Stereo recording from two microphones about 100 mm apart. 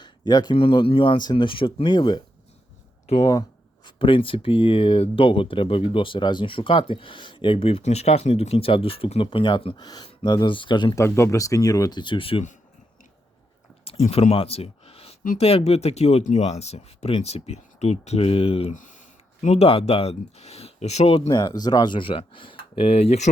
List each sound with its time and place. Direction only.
0.0 s a sound: 45° left (ahead or behind)
0.5 s speech: 60° left (ahead or behind)
3.1 s speech: 90° left
3.8 s speech: 60° left (ahead or behind)
9.7 s speech: 45° left (ahead or behind)
10.9 s speech: 25° left (ahead or behind); by 12.5 s 65° left (ahead or behind)
13.8 s speech: 80° left
21.2 s speech: 45° left (ahead or behind); by 23.1 s 85° left